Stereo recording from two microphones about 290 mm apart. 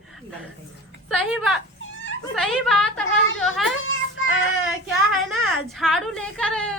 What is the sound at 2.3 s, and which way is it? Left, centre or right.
A woman's voice, centre.